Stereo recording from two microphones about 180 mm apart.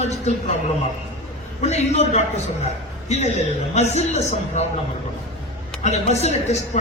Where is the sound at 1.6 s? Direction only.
35° left (ahead or behind).